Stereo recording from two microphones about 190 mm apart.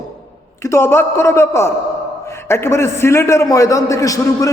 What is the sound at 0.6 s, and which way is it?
A man's voice, 15° left (ahead or behind).